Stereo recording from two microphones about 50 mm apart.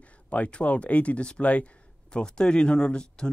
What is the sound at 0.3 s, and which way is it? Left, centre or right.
Speech, left.